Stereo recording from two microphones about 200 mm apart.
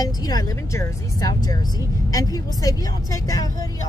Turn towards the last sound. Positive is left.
turn(degrees=20)  # may be behind; listen again after turning